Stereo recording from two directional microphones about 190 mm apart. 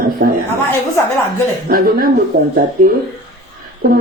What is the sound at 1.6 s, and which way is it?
Speech, 50° right (ahead or behind).